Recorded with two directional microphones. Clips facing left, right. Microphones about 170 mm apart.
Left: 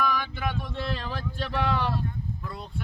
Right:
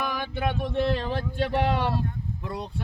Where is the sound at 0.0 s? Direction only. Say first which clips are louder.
Even; 25° right (ahead or behind).